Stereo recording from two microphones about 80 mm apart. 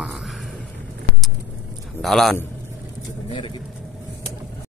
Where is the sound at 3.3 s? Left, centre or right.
Left.